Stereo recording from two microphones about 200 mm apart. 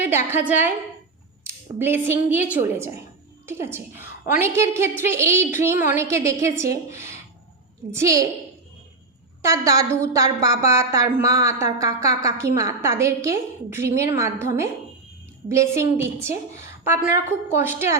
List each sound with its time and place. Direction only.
0.3 s a woman's voice: 10° right (ahead or behind)
9.4 s a woman's voice: 15° right (ahead or behind)
15.4 s a woman's voice: 15° right (ahead or behind)